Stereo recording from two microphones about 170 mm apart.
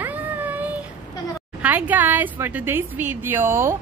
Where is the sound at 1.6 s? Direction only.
10° right (ahead or behind).